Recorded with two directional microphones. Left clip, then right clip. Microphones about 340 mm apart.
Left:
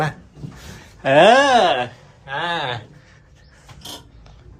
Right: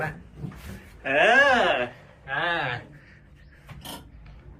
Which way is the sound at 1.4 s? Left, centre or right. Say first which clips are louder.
Left 6 dB; centre.